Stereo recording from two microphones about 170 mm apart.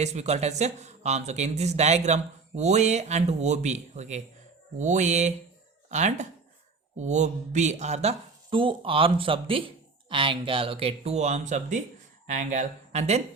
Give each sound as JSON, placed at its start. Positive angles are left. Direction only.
{"t": 0.0, "sound": "speech", "side_deg": -40}